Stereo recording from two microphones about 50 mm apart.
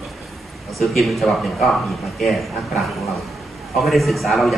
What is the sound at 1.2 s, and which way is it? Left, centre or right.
Speech, centre.